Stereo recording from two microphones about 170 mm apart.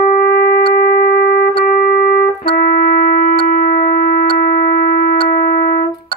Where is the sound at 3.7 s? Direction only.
55° left (ahead or behind).